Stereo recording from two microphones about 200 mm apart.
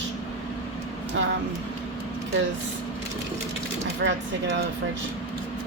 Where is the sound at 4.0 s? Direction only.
60° right (ahead or behind).